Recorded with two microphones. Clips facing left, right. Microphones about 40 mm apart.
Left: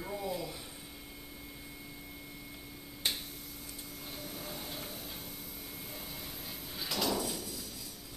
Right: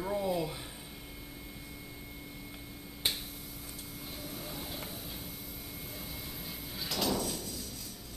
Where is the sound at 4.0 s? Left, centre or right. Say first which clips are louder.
Right 1 dB; centre.